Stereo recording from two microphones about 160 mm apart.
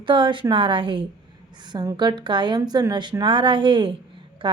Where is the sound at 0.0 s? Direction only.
30° right (ahead or behind).